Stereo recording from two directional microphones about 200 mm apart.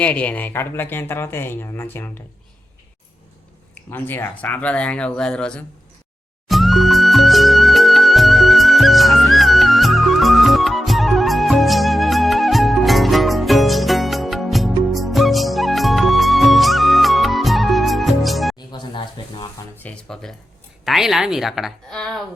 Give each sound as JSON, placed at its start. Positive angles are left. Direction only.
{"t": 0.0, "sound": "speech", "side_deg": 5}
{"t": 3.9, "sound": "speech", "side_deg": 10}
{"t": 6.5, "sound": "music", "side_deg": 0}
{"t": 18.7, "sound": "a sound", "side_deg": 25}
{"t": 19.7, "sound": "music", "side_deg": 5}
{"t": 20.8, "sound": "a woman's voice", "side_deg": 0}